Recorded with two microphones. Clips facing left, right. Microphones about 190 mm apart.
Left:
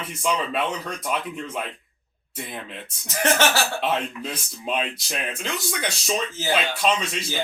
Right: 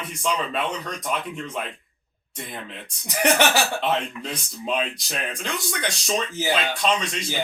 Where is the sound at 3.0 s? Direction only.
15° right (ahead or behind).